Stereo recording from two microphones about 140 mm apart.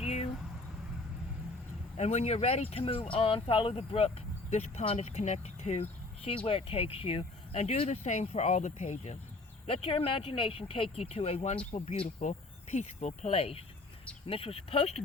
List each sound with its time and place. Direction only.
0.0 s vehicle: 50° left (ahead or behind)
2.0 s speech: 50° left (ahead or behind)
9.6 s speech: 40° left (ahead or behind)